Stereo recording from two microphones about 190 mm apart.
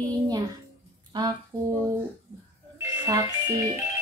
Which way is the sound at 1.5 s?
20° right (ahead or behind).